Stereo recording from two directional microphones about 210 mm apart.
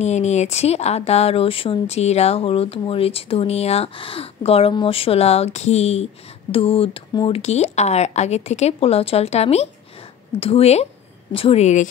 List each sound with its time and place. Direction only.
0.0 s speech: 30° left (ahead or behind)